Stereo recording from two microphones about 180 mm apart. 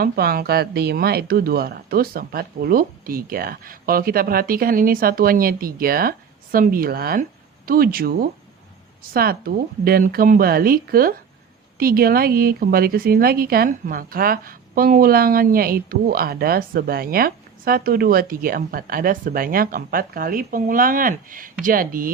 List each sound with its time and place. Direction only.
0.0 s speech: 55° right (ahead or behind)